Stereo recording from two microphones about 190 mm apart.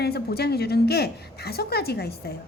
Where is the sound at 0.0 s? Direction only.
55° left (ahead or behind).